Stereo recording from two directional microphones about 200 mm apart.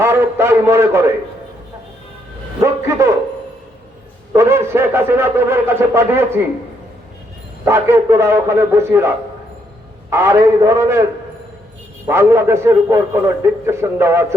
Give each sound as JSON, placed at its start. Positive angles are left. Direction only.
{"t": 0.0, "sound": "a man's voice", "side_deg": -10}
{"t": 2.6, "sound": "a man's voice", "side_deg": -15}
{"t": 4.3, "sound": "a man's voice", "side_deg": -15}
{"t": 7.6, "sound": "a man's voice", "side_deg": -15}
{"t": 12.0, "sound": "a man's voice", "side_deg": -10}